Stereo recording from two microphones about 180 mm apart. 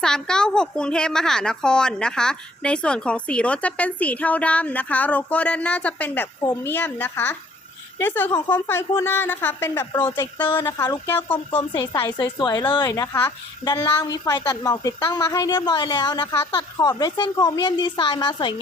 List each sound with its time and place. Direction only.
0.0 s a woman's voice: 5° left (ahead or behind); by 11.1 s 20° left (ahead or behind)
11.1 s speech: 10° left (ahead or behind)
11.5 s a woman's voice: 25° left (ahead or behind)